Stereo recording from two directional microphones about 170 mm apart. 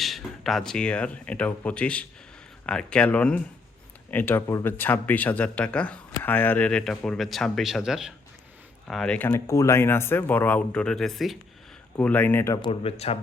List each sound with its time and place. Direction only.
0.0 s speech: centre (ahead or behind)
12.6 s speech: 35° left (ahead or behind)